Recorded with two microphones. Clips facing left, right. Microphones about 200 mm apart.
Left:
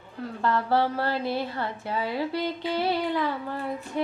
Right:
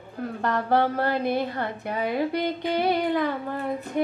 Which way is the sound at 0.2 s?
50° right (ahead or behind).